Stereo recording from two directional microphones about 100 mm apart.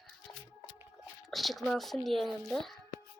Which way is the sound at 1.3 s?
Centre (ahead or behind).